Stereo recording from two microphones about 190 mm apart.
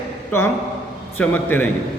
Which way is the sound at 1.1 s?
10° left (ahead or behind).